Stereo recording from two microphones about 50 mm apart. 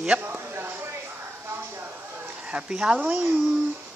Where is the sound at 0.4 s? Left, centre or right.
Right.